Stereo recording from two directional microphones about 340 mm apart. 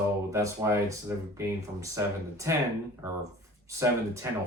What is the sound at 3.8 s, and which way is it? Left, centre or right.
Speech, centre.